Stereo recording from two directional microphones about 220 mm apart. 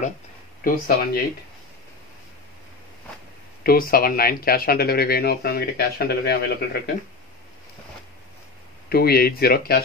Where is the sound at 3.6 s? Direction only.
45° left (ahead or behind).